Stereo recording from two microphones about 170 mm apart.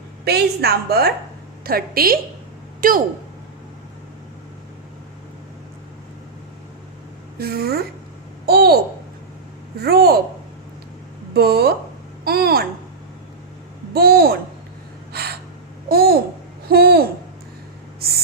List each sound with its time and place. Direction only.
0.3 s a woman's voice: 70° right (ahead or behind)
7.3 s a woman's voice: 65° right (ahead or behind)
11.3 s a woman's voice: 65° right (ahead or behind)
13.9 s a woman's voice: 65° right (ahead or behind)
15.1 s gasp: 65° right (ahead or behind)
15.9 s a woman's voice: 65° right (ahead or behind)